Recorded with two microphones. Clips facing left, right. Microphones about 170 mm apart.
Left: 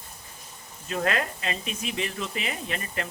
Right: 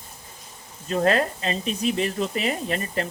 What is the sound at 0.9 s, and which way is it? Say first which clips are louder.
Speech: right 6 dB; 35° right (ahead or behind).